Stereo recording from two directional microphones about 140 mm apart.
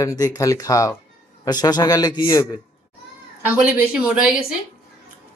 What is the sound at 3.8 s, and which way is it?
Speech, 5° right (ahead or behind).